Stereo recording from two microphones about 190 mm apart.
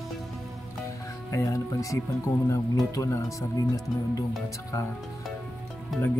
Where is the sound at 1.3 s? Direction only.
15° left (ahead or behind).